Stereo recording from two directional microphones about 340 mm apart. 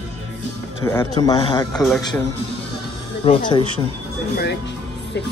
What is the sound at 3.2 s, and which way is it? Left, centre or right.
Speech, centre.